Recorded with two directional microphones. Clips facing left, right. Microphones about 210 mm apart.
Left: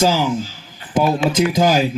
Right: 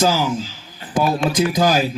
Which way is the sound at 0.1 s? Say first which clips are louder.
Left 2 dB; 15° left (ahead or behind).